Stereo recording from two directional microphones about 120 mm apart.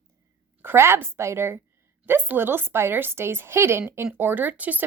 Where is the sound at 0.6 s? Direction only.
20° right (ahead or behind).